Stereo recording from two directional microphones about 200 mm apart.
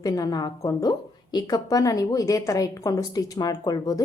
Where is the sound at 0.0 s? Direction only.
20° left (ahead or behind).